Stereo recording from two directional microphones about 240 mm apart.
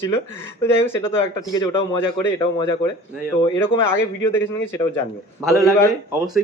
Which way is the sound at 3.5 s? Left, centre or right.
Centre.